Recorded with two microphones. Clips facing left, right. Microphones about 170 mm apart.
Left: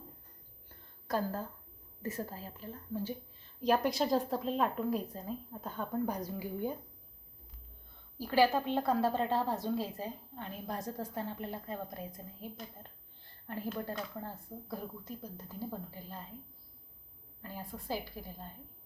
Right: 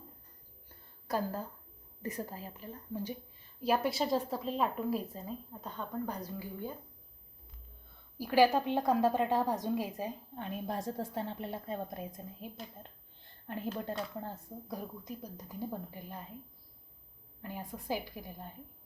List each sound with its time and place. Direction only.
1.0 s a woman's voice: 10° right (ahead or behind)
3.6 s a woman's voice: 5° right (ahead or behind); by 6.7 s 15° left (ahead or behind)
8.2 s a woman's voice: 15° right (ahead or behind)
17.4 s a woman's voice: 20° right (ahead or behind)